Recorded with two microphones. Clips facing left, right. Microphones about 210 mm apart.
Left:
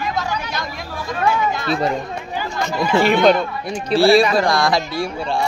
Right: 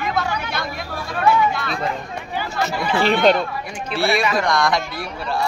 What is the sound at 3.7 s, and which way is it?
Speech, 35° left (ahead or behind).